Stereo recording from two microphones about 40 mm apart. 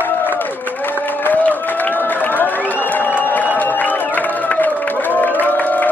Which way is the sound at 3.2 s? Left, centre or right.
Left.